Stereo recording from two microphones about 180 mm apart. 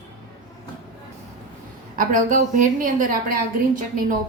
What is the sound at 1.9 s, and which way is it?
A woman's voice, 45° right (ahead or behind).